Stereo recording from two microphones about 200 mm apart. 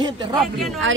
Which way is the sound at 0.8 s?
70° right (ahead or behind).